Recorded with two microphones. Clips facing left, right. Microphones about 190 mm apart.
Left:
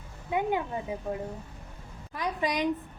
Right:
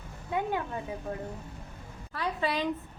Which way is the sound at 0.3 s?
15° left (ahead or behind).